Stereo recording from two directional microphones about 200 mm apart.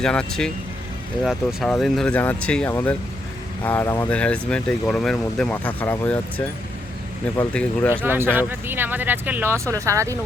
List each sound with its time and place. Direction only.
0.0 s speech: 5° left (ahead or behind)
8.0 s speech: 10° right (ahead or behind)